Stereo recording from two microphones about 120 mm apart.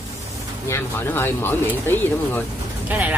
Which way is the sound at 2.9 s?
15° right (ahead or behind).